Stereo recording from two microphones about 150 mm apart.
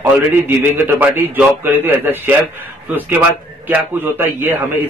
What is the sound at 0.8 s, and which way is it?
A man's voice, 15° right (ahead or behind).